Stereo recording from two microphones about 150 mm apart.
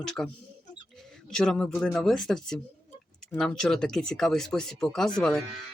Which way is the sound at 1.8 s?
5° left (ahead or behind).